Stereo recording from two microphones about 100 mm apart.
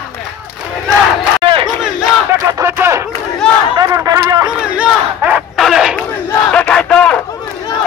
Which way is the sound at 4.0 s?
40° right (ahead or behind).